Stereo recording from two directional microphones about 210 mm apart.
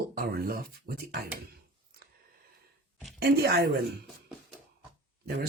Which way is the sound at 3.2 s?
45° right (ahead or behind).